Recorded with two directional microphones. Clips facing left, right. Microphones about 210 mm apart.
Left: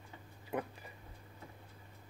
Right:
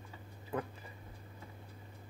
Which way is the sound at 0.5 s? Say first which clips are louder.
Even; 15° left (ahead or behind).